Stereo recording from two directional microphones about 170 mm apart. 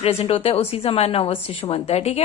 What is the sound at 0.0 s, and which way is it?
A woman's voice, 35° left (ahead or behind).